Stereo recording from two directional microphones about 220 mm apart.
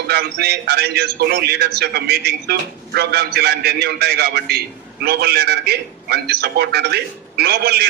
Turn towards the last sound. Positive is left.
turn(degrees=-45)  # may be behind; listen again after turning